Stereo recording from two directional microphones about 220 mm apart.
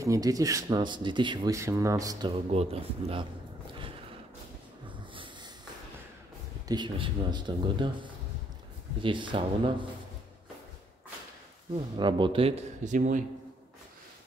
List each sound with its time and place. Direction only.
0.0 s speech: 15° right (ahead or behind)
4.8 s a sound: 20° right (ahead or behind)
6.7 s speech: 20° right (ahead or behind)
11.7 s speech: 20° right (ahead or behind)